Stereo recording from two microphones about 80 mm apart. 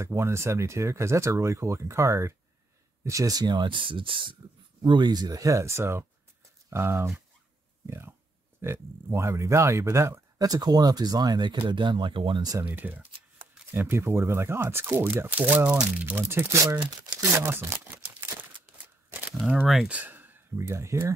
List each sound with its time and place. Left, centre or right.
0.0 s speech: right
3.5 s speech: right
4.8 s speech: right
10.4 s speech: right
12.6 s speech: right
19.9 s a sound: right
20.6 s speech: right